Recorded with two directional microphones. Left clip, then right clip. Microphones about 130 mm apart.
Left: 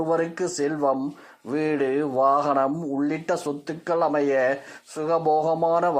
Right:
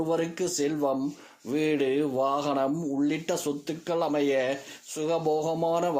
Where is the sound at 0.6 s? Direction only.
15° right (ahead or behind).